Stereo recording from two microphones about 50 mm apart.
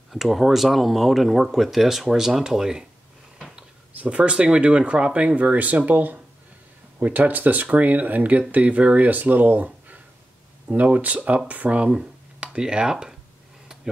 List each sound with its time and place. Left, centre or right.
0.1 s speech: centre
3.9 s speech: right